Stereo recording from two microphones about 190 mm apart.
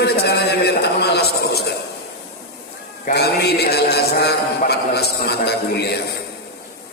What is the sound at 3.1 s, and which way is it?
A man's voice, 60° left (ahead or behind).